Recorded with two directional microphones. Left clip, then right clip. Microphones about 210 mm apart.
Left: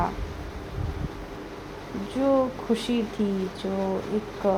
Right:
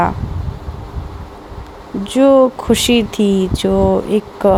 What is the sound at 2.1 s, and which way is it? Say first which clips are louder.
Speech: right 14 dB; 50° right (ahead or behind).